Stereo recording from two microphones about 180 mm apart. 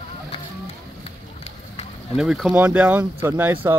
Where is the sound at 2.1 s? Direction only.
5° right (ahead or behind).